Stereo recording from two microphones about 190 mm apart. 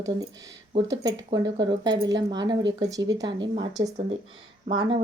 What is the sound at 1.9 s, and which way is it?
Speech, 70° right (ahead or behind).